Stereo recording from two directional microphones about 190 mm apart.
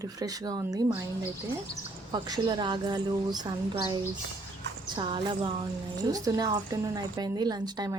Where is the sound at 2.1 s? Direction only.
20° right (ahead or behind).